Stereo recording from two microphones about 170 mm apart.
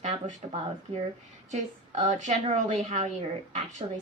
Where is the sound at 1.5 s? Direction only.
45° right (ahead or behind).